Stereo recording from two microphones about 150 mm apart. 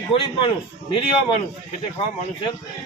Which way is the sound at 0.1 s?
35° left (ahead or behind).